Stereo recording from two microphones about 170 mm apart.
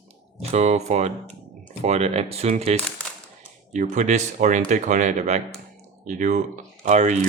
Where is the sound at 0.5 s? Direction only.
40° right (ahead or behind).